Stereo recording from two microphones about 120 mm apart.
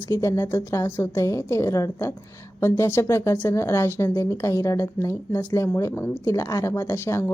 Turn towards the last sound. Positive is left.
turn(degrees=20)  # may be behind; listen again after turning